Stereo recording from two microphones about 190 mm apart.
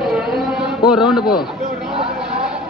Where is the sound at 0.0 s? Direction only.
Centre (ahead or behind).